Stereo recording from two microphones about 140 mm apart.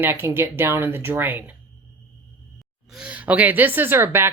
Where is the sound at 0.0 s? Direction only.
15° right (ahead or behind).